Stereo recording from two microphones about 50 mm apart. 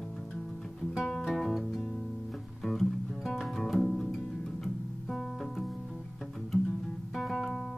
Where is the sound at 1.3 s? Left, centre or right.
Centre.